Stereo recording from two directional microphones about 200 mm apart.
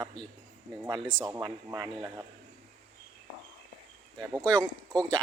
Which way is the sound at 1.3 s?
20° right (ahead or behind).